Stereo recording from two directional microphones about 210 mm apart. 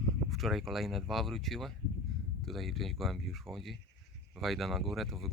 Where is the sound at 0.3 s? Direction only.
Centre (ahead or behind).